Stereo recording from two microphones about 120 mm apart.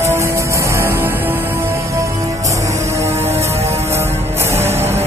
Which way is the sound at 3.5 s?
60° right (ahead or behind).